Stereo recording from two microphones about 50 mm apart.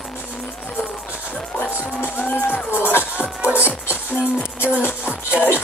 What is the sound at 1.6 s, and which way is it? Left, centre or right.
Music, left.